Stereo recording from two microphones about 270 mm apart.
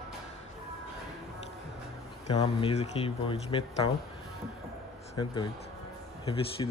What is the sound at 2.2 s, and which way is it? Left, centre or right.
Speech, left.